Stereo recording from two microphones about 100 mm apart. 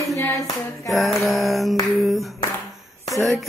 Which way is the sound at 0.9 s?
Centre (ahead or behind).